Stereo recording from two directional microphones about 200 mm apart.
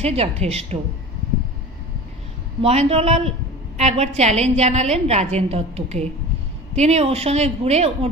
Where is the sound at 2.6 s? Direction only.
30° right (ahead or behind).